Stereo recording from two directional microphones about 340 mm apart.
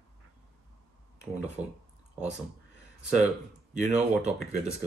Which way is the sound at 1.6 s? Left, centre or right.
Centre.